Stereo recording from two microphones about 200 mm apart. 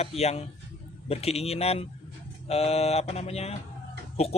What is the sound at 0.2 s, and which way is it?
Speech, 30° left (ahead or behind).